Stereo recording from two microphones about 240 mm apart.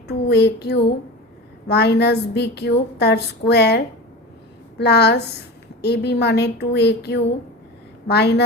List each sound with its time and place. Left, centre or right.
0.1 s a woman's voice: left